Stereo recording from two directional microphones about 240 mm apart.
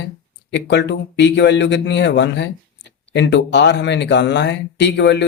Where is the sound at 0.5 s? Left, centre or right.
Left.